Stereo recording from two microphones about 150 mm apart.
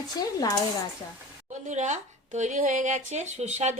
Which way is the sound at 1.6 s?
50° right (ahead or behind).